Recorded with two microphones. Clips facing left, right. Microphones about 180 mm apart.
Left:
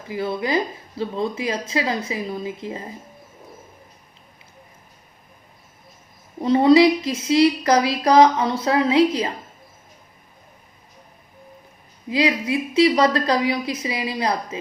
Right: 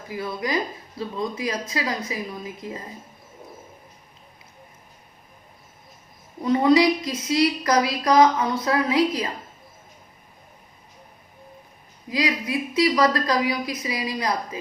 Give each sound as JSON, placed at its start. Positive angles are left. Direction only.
{"t": 0.1, "sound": "speech", "side_deg": 25}
{"t": 6.4, "sound": "speech", "side_deg": 30}
{"t": 12.0, "sound": "speech", "side_deg": 25}